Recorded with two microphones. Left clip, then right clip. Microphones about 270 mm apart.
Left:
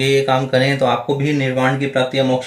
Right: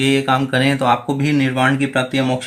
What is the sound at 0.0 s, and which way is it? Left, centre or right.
Speech, right.